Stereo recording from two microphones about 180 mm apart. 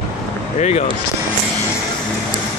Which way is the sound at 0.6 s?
40° left (ahead or behind).